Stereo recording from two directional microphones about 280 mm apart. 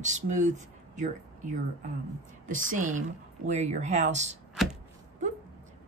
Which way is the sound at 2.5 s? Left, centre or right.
Right.